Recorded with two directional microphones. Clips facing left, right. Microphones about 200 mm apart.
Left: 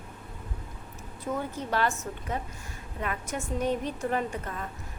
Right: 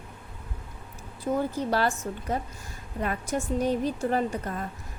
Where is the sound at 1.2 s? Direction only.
35° right (ahead or behind).